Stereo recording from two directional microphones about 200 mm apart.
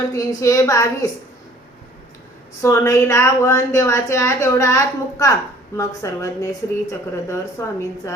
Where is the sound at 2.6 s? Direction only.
15° left (ahead or behind).